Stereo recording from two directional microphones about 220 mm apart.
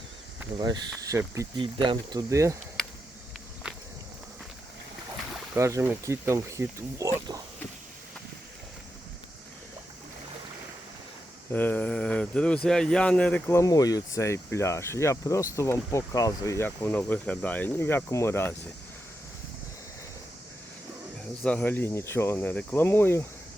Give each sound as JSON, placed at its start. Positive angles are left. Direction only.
{"t": 0.6, "sound": "speech", "side_deg": -15}
{"t": 5.5, "sound": "speech", "side_deg": -15}
{"t": 11.5, "sound": "speech", "side_deg": 10}
{"t": 21.4, "sound": "speech", "side_deg": 5}